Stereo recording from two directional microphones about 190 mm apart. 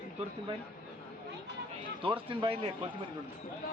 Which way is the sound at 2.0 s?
25° right (ahead or behind).